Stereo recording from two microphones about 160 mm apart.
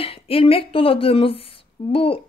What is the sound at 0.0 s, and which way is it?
A woman's voice, 35° left (ahead or behind).